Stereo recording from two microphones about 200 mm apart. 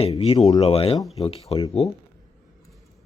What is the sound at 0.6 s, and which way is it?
Speech, 30° left (ahead or behind).